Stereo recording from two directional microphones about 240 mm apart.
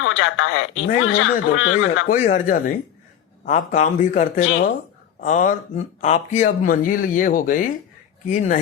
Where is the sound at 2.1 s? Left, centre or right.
Left.